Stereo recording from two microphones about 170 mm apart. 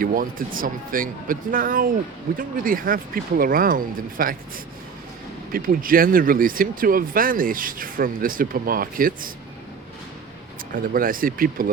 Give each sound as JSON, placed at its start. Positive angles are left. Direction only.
{"t": 0.0, "sound": "speech", "side_deg": -55}
{"t": 10.7, "sound": "speech", "side_deg": -55}